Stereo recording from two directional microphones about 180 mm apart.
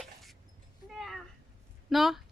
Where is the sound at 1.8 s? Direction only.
Centre (ahead or behind).